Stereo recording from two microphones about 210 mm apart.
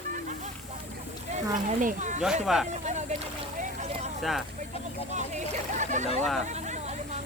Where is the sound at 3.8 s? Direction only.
30° right (ahead or behind).